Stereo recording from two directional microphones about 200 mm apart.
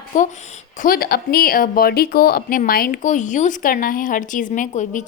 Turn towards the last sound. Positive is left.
turn(degrees=40)  # may be behind; listen again after turning